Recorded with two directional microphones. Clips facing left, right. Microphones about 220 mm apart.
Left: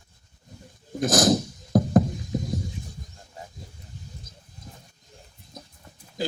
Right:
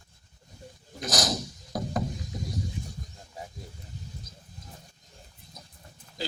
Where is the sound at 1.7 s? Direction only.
50° left (ahead or behind).